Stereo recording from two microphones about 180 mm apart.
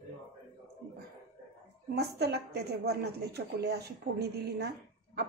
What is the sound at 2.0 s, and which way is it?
A woman's voice, 65° right (ahead or behind).